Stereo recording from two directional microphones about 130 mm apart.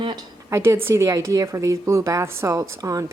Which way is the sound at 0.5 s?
20° right (ahead or behind).